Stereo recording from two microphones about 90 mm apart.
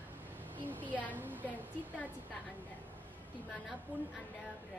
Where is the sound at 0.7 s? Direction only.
20° right (ahead or behind).